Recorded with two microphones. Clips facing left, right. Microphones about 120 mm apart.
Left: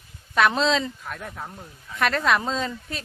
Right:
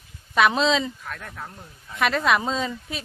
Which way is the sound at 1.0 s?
5° left (ahead or behind).